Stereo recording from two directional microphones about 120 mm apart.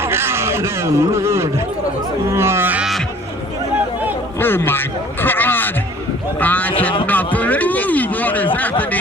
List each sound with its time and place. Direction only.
0.0 s speech: 20° right (ahead or behind)
2.3 s livestock: 20° right (ahead or behind)
4.4 s a sound: 15° left (ahead or behind)